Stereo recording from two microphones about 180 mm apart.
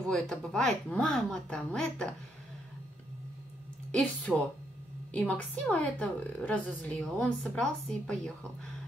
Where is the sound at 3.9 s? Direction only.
5° left (ahead or behind).